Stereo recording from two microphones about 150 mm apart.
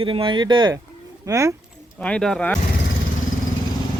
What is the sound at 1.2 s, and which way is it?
Speech, 20° right (ahead or behind).